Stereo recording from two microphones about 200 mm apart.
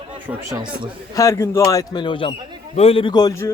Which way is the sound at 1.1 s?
15° left (ahead or behind).